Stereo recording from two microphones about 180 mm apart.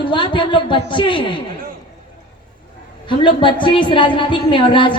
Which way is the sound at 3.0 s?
25° left (ahead or behind).